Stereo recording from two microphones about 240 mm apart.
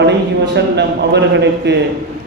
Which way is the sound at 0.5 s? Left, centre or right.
Right.